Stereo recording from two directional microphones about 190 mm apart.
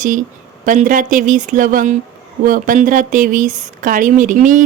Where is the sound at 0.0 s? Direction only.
45° right (ahead or behind).